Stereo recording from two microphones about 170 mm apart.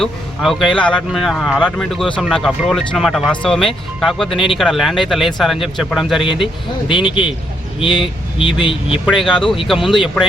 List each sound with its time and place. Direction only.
0.0 s speech: centre (ahead or behind)
6.2 s speech: 30° left (ahead or behind)
9.0 s speech: centre (ahead or behind)